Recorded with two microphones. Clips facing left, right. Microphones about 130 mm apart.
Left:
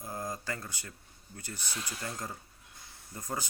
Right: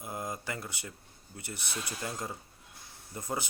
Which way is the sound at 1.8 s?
20° right (ahead or behind).